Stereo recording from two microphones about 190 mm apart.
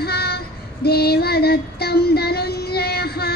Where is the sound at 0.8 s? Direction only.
55° left (ahead or behind).